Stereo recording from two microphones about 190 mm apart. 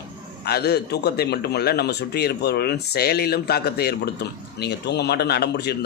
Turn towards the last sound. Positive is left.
turn(degrees=60)  # may be behind; listen again after turning